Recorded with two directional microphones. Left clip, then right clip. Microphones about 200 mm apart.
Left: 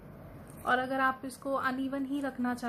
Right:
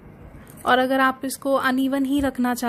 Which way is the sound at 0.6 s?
45° right (ahead or behind).